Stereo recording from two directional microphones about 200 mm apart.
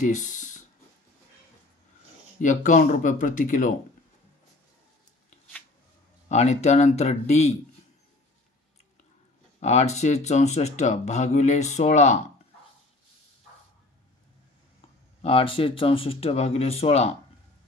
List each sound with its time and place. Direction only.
0.0 s speech: 40° left (ahead or behind)
2.4 s speech: 40° left (ahead or behind)
6.2 s speech: 35° left (ahead or behind)
9.6 s speech: 35° left (ahead or behind)
15.2 s speech: 25° left (ahead or behind)